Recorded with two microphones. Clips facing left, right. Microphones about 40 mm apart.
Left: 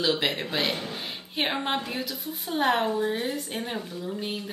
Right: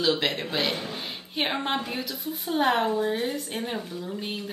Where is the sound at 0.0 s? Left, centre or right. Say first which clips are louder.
Right 1 dB; centre.